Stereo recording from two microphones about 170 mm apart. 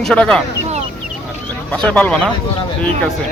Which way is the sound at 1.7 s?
5° left (ahead or behind).